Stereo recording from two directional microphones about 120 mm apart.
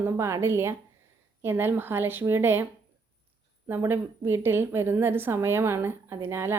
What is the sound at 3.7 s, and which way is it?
Speech, 15° right (ahead or behind).